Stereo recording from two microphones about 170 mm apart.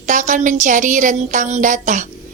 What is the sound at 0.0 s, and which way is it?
A woman's voice, 45° right (ahead or behind).